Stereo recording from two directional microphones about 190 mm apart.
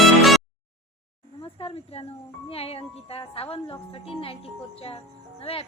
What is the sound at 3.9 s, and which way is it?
Speech, 30° left (ahead or behind).